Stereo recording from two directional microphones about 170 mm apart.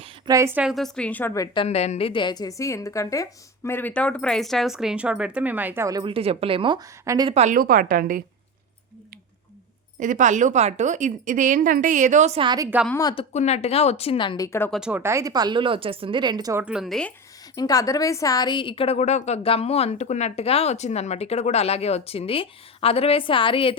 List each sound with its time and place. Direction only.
0.3 s a woman's voice: 15° right (ahead or behind); by 1.5 s 15° left (ahead or behind)
1.5 s a woman's voice: 40° left (ahead or behind); by 7.3 s 20° right (ahead or behind)
7.3 s a woman's voice: 40° right (ahead or behind)
10.0 s a woman's voice: 50° right (ahead or behind)
12.4 s speech: 25° right (ahead or behind)
13.0 s speech: 25° left (ahead or behind)
13.3 s a woman's voice: 40° left (ahead or behind); by 14.7 s 15° left (ahead or behind)
14.7 s speech: 5° right (ahead or behind)
17.5 s a woman's voice: 20° left (ahead or behind)